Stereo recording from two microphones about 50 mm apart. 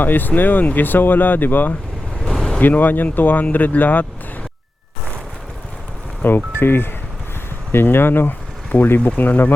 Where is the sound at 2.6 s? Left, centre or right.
Left.